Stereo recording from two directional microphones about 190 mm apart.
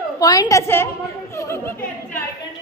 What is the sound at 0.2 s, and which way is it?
A woman's voice, 20° left (ahead or behind).